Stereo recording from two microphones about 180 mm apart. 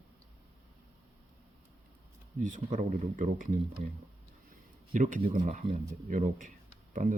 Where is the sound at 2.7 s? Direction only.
45° right (ahead or behind).